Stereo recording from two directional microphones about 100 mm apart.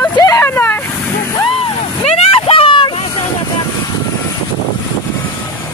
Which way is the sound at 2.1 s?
80° left.